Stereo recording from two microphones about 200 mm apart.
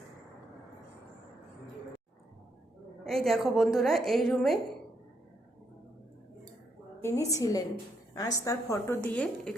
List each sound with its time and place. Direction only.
3.0 s a woman's voice: centre (ahead or behind)
7.3 s a woman's voice: 15° left (ahead or behind)